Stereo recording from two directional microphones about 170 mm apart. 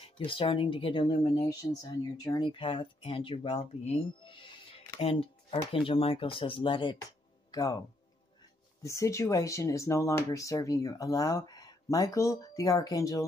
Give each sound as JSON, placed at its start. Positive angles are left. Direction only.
{"t": 0.0, "sound": "speech", "side_deg": 30}
{"t": 8.8, "sound": "speech", "side_deg": 15}